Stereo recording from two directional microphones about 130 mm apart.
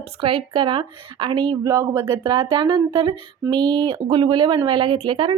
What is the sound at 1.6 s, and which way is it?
A woman's voice, 25° right (ahead or behind).